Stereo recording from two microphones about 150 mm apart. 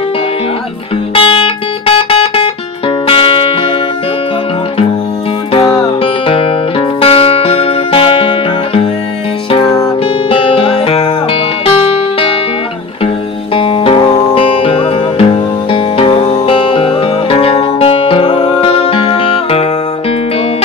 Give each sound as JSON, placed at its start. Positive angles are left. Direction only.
{"t": 1.1, "sound": "music", "side_deg": 35}
{"t": 5.7, "sound": "music", "side_deg": 35}
{"t": 10.3, "sound": "music", "side_deg": 40}
{"t": 13.6, "sound": "music", "side_deg": 35}